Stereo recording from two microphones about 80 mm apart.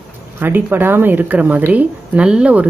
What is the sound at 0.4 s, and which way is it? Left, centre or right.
A woman's voice, right.